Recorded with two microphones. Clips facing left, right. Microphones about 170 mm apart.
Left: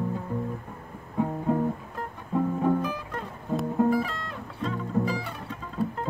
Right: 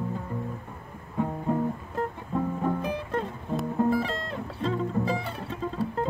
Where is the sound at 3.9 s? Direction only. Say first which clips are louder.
Even; 30° right (ahead or behind).